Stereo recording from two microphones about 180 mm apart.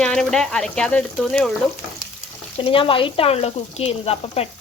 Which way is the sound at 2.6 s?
30° left (ahead or behind).